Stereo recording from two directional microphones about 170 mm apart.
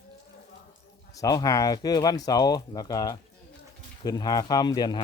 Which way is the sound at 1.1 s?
20° left (ahead or behind).